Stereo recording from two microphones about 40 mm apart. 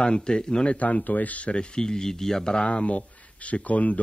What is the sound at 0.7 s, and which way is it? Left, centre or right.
Speech, left.